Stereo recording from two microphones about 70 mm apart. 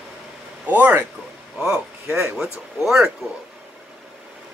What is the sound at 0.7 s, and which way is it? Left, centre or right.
Speech, right.